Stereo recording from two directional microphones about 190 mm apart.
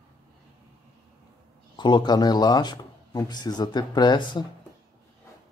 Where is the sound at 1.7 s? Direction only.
25° left (ahead or behind).